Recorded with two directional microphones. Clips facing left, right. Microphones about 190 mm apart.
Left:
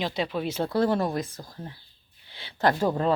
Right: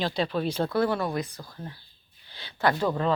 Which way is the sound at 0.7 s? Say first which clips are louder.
Left 5 dB; 35° left (ahead or behind).